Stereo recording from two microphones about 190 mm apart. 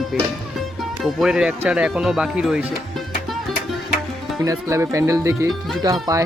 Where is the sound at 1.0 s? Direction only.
Centre (ahead or behind).